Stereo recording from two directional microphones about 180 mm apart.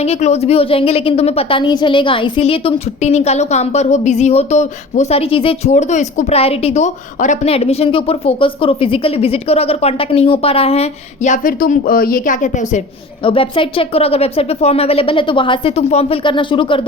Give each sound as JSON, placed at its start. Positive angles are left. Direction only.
{"t": 0.0, "sound": "a woman's voice", "side_deg": 35}
{"t": 13.2, "sound": "speech", "side_deg": 30}